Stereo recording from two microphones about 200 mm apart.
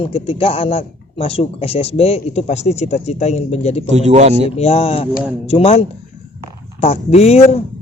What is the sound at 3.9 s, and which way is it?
Speech, 35° right (ahead or behind).